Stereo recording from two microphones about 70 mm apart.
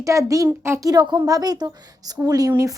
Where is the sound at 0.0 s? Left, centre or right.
Right.